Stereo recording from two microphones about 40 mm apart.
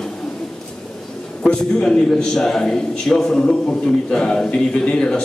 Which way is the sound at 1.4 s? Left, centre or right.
Centre.